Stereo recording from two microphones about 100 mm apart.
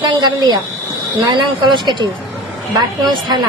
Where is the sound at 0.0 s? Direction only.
45° right (ahead or behind).